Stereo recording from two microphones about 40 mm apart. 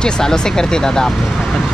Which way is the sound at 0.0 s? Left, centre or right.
Centre.